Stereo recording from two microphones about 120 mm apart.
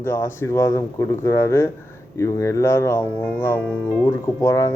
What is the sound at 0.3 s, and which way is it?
A man's voice, 20° left (ahead or behind).